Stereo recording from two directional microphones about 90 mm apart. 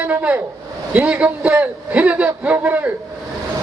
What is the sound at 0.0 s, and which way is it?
A man's voice, 20° right (ahead or behind).